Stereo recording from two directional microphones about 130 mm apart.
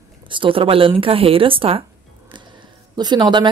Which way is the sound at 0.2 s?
40° right (ahead or behind).